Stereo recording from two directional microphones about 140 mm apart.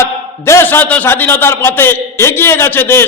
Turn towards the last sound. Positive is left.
turn(degrees=15)  # may be behind; listen again after turning